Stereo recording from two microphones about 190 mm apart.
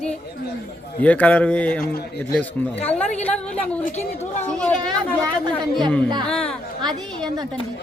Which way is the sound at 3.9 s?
35° left (ahead or behind).